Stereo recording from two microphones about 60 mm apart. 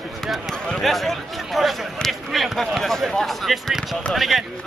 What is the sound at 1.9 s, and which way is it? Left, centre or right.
Speech, centre.